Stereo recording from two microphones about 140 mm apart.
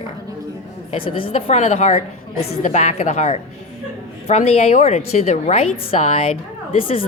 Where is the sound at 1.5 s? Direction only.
55° left (ahead or behind).